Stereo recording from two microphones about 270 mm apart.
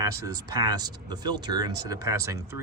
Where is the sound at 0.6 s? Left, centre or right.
Centre.